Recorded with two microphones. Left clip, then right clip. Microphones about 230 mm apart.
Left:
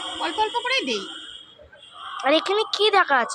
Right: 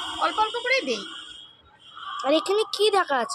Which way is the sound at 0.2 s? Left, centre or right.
Centre.